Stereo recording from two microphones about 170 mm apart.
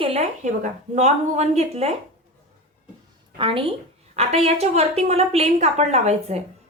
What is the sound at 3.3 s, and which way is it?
A woman's voice, 30° right (ahead or behind).